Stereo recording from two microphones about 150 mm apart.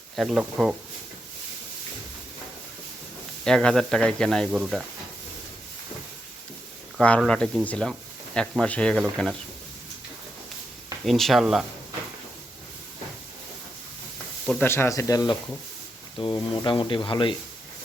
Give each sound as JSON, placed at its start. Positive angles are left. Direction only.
{"t": 0.2, "sound": "speech", "side_deg": 0}
{"t": 3.4, "sound": "speech", "side_deg": 5}
{"t": 4.5, "sound": "speech", "side_deg": -5}
{"t": 7.2, "sound": "speech", "side_deg": 5}
{"t": 11.0, "sound": "speech", "side_deg": 0}
{"t": 14.6, "sound": "speech", "side_deg": 15}